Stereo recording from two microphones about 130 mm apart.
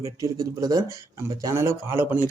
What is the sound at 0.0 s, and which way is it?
Speech, 25° right (ahead or behind).